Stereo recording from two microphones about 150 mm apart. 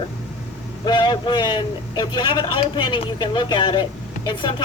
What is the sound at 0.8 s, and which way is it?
A man's voice, 30° left (ahead or behind).